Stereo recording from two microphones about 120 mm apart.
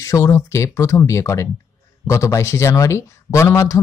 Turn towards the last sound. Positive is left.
turn(degrees=25)  # may be behind; listen again after turning